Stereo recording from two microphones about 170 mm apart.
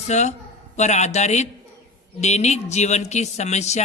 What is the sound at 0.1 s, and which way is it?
A man's voice, 45° left (ahead or behind).